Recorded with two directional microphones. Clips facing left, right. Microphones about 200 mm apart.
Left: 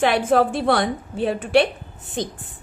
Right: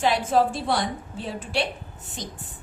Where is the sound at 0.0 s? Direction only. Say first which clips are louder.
Left 4 dB; 60° left (ahead or behind).